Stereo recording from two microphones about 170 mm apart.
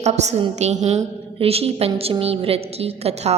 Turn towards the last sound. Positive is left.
turn(degrees=-35)  # may be behind; listen again after turning